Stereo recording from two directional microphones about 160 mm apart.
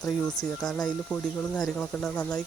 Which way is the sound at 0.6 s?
5° left (ahead or behind).